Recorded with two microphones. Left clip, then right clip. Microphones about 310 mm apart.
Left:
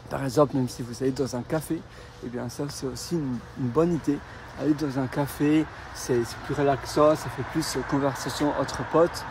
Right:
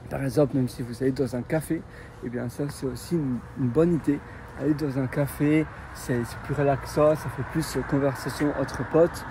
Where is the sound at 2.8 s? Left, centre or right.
Left.